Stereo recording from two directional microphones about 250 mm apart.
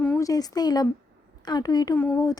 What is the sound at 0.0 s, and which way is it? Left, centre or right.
A woman's voice, centre.